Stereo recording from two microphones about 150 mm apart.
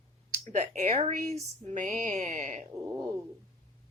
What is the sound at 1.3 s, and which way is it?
Speech, 55° right (ahead or behind).